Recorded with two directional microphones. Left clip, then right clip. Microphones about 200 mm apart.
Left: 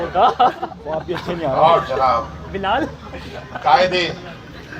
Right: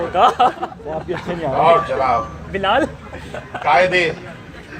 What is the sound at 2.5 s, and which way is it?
Speech, 50° right (ahead or behind).